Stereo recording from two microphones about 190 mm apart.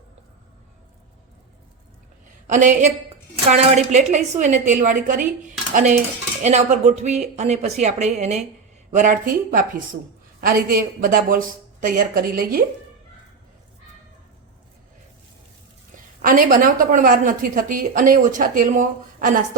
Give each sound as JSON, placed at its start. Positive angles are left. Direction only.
{"t": 2.5, "sound": "speech", "side_deg": -40}
{"t": 16.2, "sound": "speech", "side_deg": -45}